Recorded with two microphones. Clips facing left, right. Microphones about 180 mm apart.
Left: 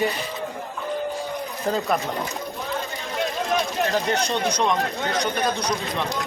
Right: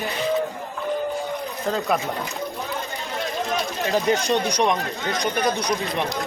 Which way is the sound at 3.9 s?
15° right (ahead or behind).